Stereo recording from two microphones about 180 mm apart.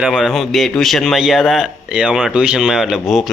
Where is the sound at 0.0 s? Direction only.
5° right (ahead or behind).